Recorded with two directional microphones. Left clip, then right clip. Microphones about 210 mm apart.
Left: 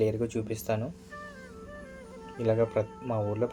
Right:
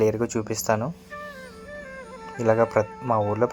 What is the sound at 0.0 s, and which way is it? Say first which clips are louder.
Speech: right 6 dB; 25° right (ahead or behind).